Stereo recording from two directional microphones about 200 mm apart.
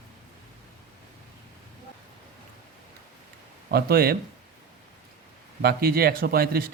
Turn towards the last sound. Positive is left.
turn(degrees=-50)  # may be behind; listen again after turning